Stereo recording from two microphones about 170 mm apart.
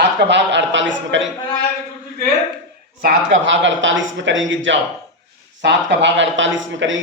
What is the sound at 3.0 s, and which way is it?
Speech, 90° right.